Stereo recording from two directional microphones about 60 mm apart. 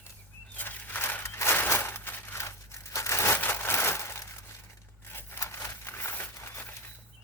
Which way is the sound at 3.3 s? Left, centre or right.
Left.